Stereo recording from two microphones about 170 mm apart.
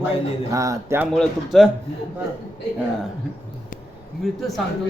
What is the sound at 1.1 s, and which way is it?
Speech, centre (ahead or behind).